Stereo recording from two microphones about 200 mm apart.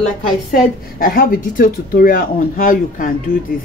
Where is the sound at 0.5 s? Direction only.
45° left (ahead or behind).